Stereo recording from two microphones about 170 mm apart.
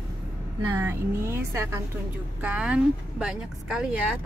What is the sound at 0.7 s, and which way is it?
Speech, 15° right (ahead or behind).